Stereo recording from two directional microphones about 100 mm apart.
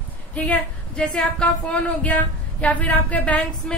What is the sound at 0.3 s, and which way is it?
Speech, 15° left (ahead or behind).